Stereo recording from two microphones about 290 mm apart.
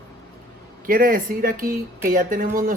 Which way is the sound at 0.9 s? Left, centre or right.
Right.